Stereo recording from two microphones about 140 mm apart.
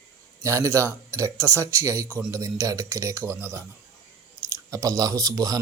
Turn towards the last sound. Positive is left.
turn(degrees=-25)  # may be behind; listen again after turning